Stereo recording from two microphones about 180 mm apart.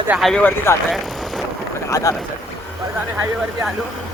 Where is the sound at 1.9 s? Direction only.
20° left (ahead or behind).